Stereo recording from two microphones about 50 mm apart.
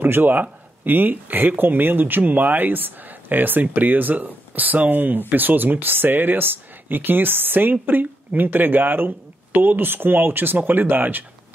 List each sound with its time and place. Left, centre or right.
0.0 s speech: right